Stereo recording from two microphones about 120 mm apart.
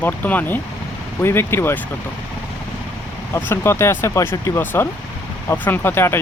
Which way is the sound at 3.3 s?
20° left (ahead or behind).